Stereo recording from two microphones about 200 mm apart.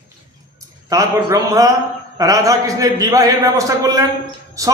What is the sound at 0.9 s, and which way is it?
A man's voice, 15° right (ahead or behind).